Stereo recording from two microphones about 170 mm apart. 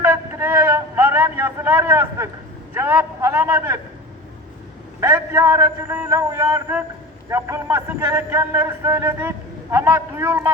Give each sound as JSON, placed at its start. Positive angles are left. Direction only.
{"t": 0.0, "sound": "a sound", "side_deg": -15}
{"t": 2.7, "sound": "a man's voice", "side_deg": -15}
{"t": 4.9, "sound": "a man's voice", "side_deg": -15}